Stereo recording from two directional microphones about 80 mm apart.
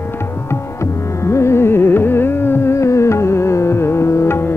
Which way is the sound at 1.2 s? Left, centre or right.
Left.